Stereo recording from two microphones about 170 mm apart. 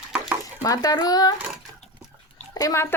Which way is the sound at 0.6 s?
20° left (ahead or behind).